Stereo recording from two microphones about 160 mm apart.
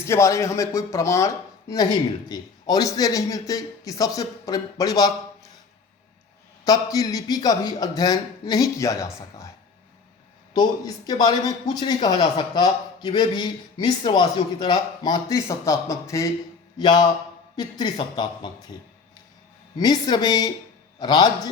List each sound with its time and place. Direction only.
0.0 s speech: 20° left (ahead or behind)
6.7 s speech: 20° left (ahead or behind)
10.5 s speech: 25° left (ahead or behind)
19.7 s speech: 25° left (ahead or behind)